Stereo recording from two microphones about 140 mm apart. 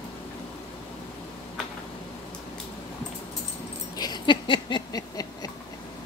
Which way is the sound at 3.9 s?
30° left (ahead or behind).